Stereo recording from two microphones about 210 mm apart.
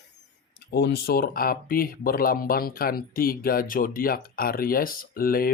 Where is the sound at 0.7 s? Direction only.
50° left (ahead or behind).